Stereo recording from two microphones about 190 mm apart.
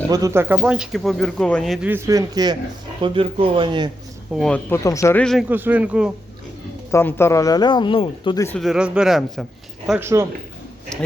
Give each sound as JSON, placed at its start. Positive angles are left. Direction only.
{"t": 0.1, "sound": "speech", "side_deg": -15}
{"t": 1.9, "sound": "speech", "side_deg": -15}
{"t": 4.4, "sound": "speech", "side_deg": 5}
{"t": 5.2, "sound": "speech", "side_deg": 0}
{"t": 5.5, "sound": "speech", "side_deg": -10}
{"t": 6.9, "sound": "speech", "side_deg": 15}
{"t": 8.4, "sound": "speech", "side_deg": 0}
{"t": 10.0, "sound": "speech", "side_deg": -15}